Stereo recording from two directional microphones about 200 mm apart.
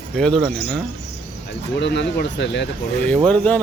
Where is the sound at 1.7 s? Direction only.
60° left (ahead or behind).